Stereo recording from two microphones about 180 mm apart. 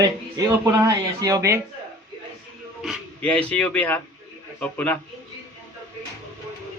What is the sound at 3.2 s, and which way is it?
Speech, 5° left (ahead or behind).